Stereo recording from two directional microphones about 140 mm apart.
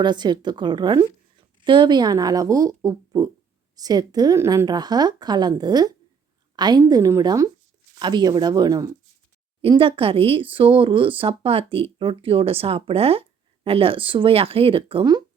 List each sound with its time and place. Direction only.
0.0 s a woman's voice: 30° right (ahead or behind)